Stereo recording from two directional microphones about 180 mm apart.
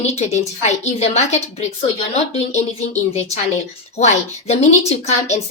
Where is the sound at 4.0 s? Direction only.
40° left (ahead or behind).